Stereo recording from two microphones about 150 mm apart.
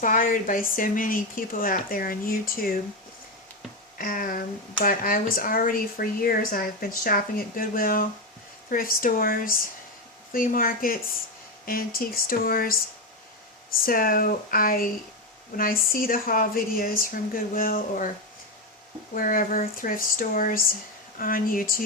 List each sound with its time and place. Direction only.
0.0 s speech: 65° left (ahead or behind)
3.9 s speech: 70° left (ahead or behind)
13.8 s speech: 75° left (ahead or behind)
19.1 s speech: 70° left (ahead or behind)